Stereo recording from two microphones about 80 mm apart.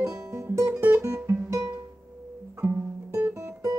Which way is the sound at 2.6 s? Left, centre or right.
Right.